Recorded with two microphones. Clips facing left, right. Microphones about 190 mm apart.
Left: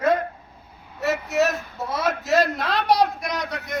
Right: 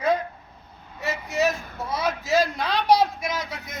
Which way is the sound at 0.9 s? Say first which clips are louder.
Left 5 dB; centre (ahead or behind).